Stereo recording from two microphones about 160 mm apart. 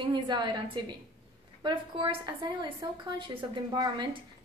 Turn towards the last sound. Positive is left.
turn(degrees=-25)  # may be behind; listen again after turning